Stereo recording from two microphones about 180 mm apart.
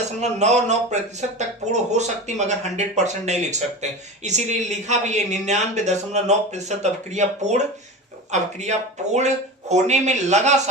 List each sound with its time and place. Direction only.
0.2 s speech: 40° right (ahead or behind)